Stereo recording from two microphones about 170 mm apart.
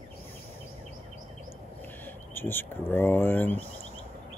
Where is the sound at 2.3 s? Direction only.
10° left (ahead or behind).